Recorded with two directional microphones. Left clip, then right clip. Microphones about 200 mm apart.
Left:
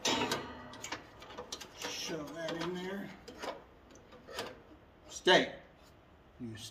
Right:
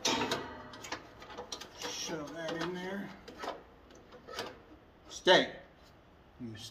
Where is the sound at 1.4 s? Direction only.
5° right (ahead or behind).